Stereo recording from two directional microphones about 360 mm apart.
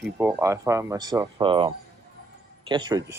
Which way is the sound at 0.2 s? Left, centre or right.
Centre.